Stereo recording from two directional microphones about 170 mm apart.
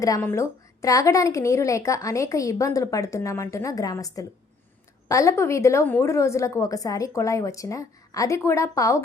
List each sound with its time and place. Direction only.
0.0 s a woman's voice: 15° left (ahead or behind)